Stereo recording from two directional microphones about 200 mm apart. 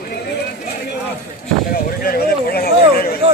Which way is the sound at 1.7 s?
50° left (ahead or behind).